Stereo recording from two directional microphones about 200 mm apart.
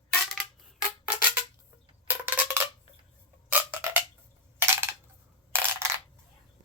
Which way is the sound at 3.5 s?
10° right (ahead or behind).